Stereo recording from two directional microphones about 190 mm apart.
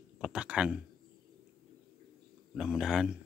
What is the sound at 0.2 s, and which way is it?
Speech, 5° right (ahead or behind).